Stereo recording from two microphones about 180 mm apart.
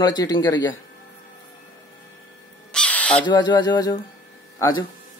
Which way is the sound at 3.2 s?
25° left (ahead or behind).